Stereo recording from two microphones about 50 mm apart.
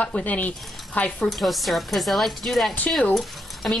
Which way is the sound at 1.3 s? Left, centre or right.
Centre.